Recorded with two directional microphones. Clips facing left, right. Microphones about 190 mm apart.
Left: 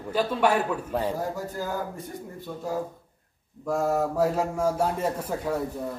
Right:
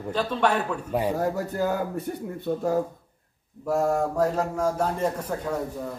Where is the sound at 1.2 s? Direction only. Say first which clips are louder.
Right 5 dB; 65° right (ahead or behind).